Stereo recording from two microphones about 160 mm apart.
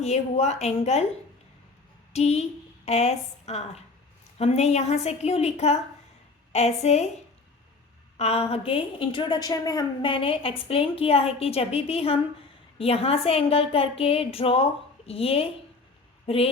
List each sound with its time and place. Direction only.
0.0 s a woman's voice: 45° left (ahead or behind)
2.1 s a woman's voice: 40° left (ahead or behind)
8.2 s a woman's voice: 40° left (ahead or behind)